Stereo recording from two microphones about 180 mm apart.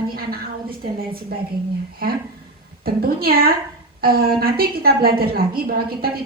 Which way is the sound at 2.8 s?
55° right (ahead or behind).